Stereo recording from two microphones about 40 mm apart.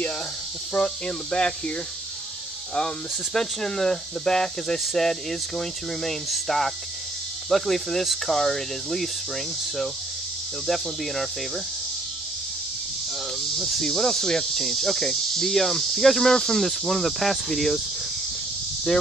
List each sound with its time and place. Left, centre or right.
0.7 s speech: left
3.3 s cricket: centre
5.6 s speech: centre
13.6 s cricket: centre